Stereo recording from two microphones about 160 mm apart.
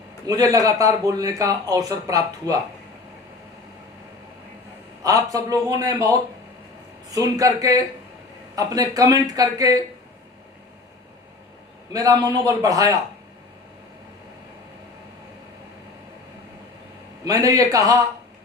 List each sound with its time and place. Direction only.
0.3 s speech: 20° right (ahead or behind)
5.0 s speech: 20° right (ahead or behind)
11.9 s speech: 20° right (ahead or behind)
17.2 s speech: 20° right (ahead or behind)